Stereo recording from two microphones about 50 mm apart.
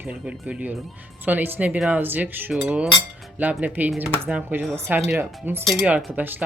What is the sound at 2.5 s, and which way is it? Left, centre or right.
Speech, centre.